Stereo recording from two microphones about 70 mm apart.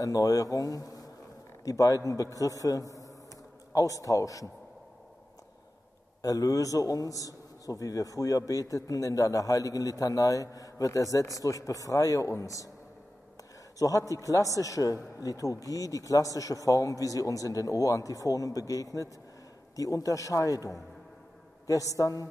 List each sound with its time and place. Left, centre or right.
0.0 s a man's voice: left
6.2 s a man's voice: left
13.7 s a man's voice: left